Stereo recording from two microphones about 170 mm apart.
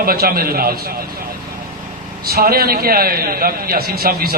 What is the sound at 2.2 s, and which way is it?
A man's voice, 60° right (ahead or behind).